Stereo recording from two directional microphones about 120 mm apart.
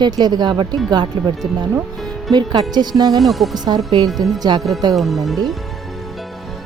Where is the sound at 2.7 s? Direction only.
35° right (ahead or behind).